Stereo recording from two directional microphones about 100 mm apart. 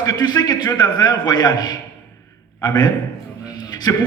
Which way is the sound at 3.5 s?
45° left (ahead or behind).